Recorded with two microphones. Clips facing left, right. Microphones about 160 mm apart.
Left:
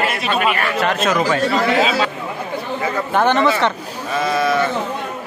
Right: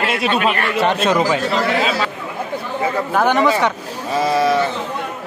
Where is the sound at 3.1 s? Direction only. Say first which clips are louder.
Even; 5° right (ahead or behind).